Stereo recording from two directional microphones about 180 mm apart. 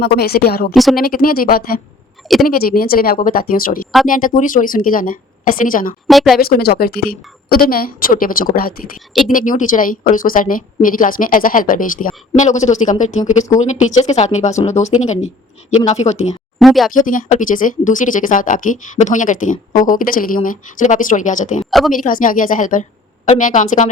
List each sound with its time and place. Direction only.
0.0 s a woman's voice: 65° left (ahead or behind)
0.7 s speech: centre (ahead or behind)
0.9 s a woman's voice: 55° left (ahead or behind)
2.2 s a sound: centre (ahead or behind)
2.5 s a woman's voice: 55° left (ahead or behind)
6.1 s speech: centre (ahead or behind)
6.4 s a woman's voice: 60° left (ahead or behind); by 16.3 s 40° left (ahead or behind)
16.6 s speech: centre (ahead or behind)
16.9 s speech: 50° left (ahead or behind)
21.7 s speech: centre (ahead or behind)
21.9 s speech: 50° left (ahead or behind)